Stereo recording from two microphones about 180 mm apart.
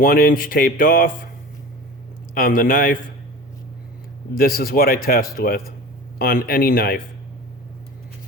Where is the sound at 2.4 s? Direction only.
50° left (ahead or behind).